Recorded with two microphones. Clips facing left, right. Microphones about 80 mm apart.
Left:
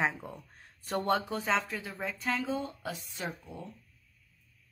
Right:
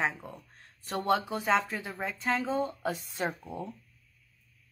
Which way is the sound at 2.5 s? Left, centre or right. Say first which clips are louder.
Right 5 dB; right.